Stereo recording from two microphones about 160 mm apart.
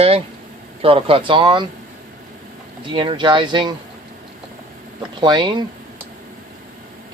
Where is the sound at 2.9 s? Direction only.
30° right (ahead or behind).